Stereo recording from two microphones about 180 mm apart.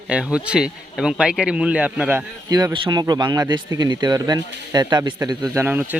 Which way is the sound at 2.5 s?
20° right (ahead or behind).